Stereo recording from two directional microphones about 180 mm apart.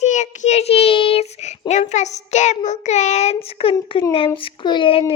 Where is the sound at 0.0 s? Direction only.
40° left (ahead or behind).